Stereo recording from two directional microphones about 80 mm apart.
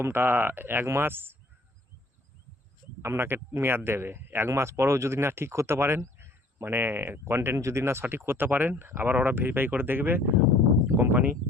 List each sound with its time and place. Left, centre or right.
0.0 s speech: right
3.0 s speech: right
10.8 s a sound: right